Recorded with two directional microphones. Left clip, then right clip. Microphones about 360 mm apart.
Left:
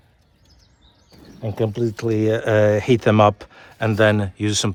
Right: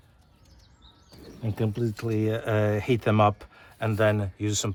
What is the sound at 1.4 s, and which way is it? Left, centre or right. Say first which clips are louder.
Speech: left 8 dB; left.